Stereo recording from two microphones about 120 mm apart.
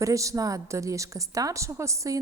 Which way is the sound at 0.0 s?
25° right (ahead or behind).